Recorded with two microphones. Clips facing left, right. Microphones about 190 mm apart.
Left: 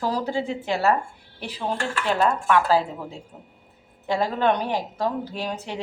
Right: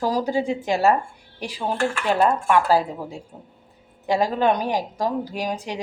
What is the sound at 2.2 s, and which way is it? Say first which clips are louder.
A woman's voice: right 2 dB; 10° right (ahead or behind).